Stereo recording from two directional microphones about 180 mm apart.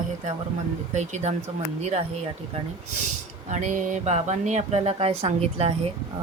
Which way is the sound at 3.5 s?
40° right (ahead or behind).